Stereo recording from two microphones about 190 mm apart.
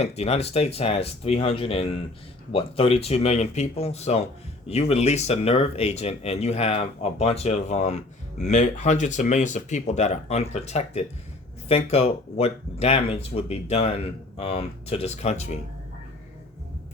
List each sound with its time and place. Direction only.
0.0 s speech: 35° left (ahead or behind)